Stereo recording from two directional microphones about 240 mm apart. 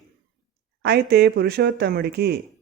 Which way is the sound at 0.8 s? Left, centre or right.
Right.